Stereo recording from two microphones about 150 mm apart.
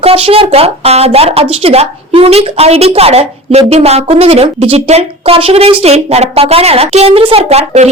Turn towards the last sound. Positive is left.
turn(degrees=-45)  # may be behind; listen again after turning